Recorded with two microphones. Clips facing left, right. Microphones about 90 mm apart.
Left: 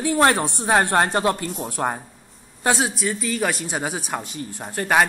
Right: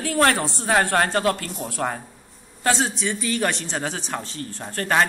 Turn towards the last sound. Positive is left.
turn(degrees=15)  # may be behind; listen again after turning